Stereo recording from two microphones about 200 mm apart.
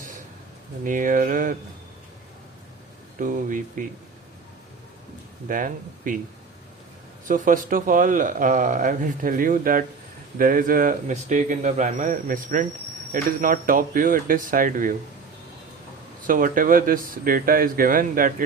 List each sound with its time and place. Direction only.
0.9 s speech: 40° right (ahead or behind)
3.2 s speech: 40° right (ahead or behind)
5.5 s speech: 45° right (ahead or behind)
7.3 s speech: 40° right (ahead or behind)
16.2 s speech: 45° right (ahead or behind)